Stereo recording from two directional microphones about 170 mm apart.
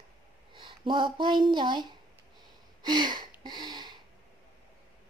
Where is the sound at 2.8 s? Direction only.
25° right (ahead or behind).